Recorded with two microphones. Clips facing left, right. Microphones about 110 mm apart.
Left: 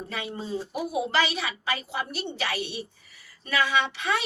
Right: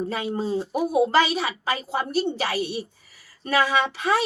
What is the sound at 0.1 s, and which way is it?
A woman's voice, 35° right (ahead or behind).